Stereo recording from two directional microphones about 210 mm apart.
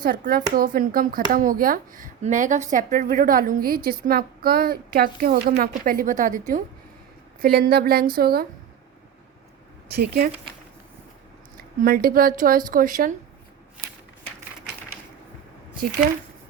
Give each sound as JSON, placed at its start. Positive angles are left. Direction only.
{"t": 0.0, "sound": "speech", "side_deg": -45}
{"t": 7.4, "sound": "speech", "side_deg": -45}
{"t": 9.9, "sound": "speech", "side_deg": -45}
{"t": 11.8, "sound": "speech", "side_deg": -45}